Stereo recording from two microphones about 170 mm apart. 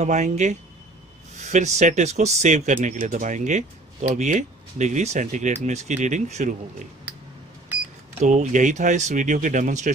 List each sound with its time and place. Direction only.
0.0 s speech: 45° right (ahead or behind)
8.2 s speech: 45° right (ahead or behind)